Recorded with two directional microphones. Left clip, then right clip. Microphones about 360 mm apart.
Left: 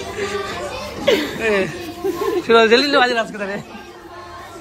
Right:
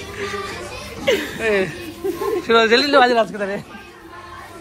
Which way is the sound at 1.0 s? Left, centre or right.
Centre.